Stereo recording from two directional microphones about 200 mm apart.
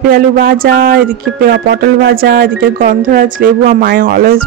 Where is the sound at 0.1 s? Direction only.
45° right (ahead or behind).